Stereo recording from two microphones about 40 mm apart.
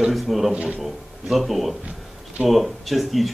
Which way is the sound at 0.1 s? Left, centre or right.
Centre.